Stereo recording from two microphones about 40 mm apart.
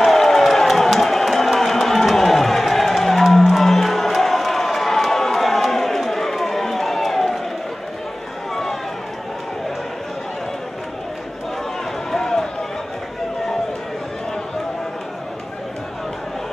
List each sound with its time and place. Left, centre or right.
0.0 s crowd: centre
12.1 s run: centre